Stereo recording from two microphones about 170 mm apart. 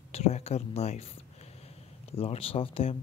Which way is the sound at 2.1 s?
35° left (ahead or behind).